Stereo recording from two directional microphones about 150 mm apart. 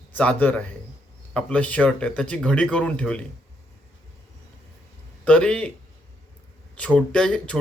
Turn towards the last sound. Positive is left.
turn(degrees=5)  # may be behind; listen again after turning